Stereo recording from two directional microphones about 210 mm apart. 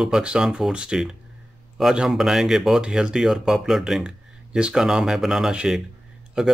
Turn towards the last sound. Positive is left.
turn(degrees=0)  # may be behind; listen again after turning